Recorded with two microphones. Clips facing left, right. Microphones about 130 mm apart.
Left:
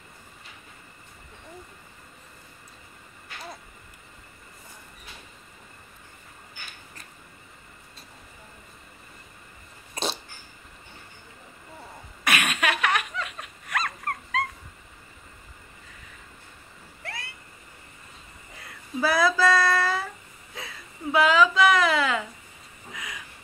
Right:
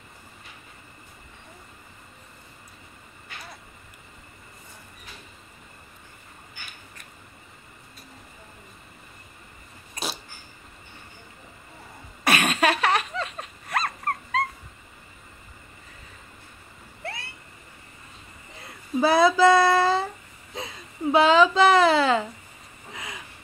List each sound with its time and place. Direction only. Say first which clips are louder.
12.3 s dog: right 4 dB; 35° right (ahead or behind)
17.0 s vehicle: right 3 dB; 30° right (ahead or behind)
18.9 s a woman's voice: right 4 dB; 25° right (ahead or behind)
22.9 s vehicle: right 1 dB; 30° right (ahead or behind)